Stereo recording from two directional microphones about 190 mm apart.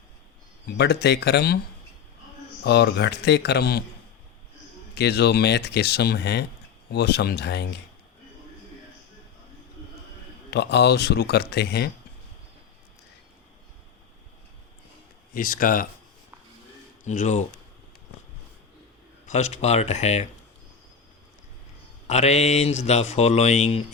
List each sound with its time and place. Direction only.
0.6 s speech: 60° left (ahead or behind)
2.6 s speech: 65° left (ahead or behind)
4.9 s speech: 60° left (ahead or behind)
10.5 s speech: 60° left (ahead or behind)
15.3 s speech: 45° left (ahead or behind)
17.0 s speech: 40° left (ahead or behind)
19.3 s speech: 35° left (ahead or behind)
22.0 s speech: 35° left (ahead or behind)